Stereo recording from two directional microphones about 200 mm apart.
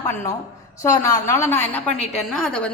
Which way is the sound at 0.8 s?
15° left (ahead or behind).